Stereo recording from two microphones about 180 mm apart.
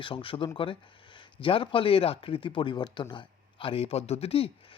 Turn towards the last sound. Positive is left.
turn(degrees=35)  # may be behind; listen again after turning